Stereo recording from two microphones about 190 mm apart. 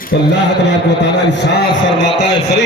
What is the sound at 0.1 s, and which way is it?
A man's voice, 55° left (ahead or behind).